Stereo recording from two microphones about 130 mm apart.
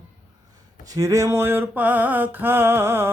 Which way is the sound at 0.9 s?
25° right (ahead or behind).